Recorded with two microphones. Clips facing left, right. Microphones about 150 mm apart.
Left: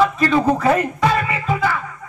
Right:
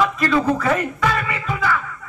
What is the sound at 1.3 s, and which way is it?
Music, 30° left (ahead or behind).